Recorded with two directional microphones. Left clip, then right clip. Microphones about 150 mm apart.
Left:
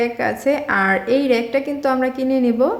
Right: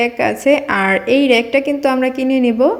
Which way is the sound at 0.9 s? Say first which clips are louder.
Right 4 dB; 30° left (ahead or behind).